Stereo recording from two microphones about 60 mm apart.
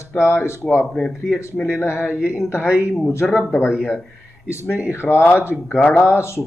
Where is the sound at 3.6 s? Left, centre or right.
Centre.